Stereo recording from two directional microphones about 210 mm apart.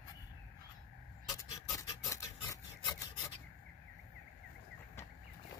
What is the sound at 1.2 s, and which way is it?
Rub, 15° left (ahead or behind).